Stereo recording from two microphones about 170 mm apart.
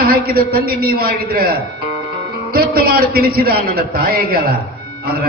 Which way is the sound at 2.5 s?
60° right (ahead or behind).